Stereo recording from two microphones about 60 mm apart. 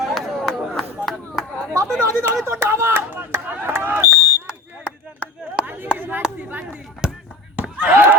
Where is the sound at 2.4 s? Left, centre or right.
Right.